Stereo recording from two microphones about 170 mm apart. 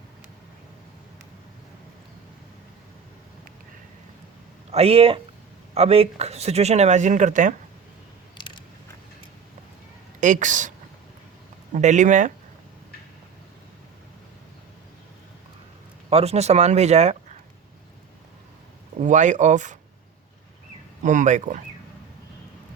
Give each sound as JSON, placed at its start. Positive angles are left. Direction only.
{"t": 4.7, "sound": "speech", "side_deg": -35}
{"t": 10.2, "sound": "speech", "side_deg": -50}
{"t": 11.7, "sound": "speech", "side_deg": -45}
{"t": 16.0, "sound": "speech", "side_deg": -35}
{"t": 18.9, "sound": "speech", "side_deg": -45}
{"t": 21.0, "sound": "speech", "side_deg": -45}